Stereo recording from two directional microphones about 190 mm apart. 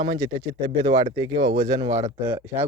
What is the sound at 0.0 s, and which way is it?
Speech, 20° right (ahead or behind).